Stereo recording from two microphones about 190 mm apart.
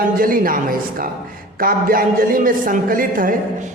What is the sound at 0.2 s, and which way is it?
A man's voice, 45° right (ahead or behind).